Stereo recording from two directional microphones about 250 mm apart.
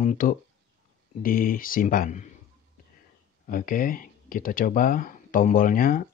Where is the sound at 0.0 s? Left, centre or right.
Left.